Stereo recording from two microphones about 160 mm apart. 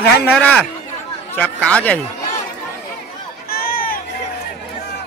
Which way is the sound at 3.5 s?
70° left (ahead or behind).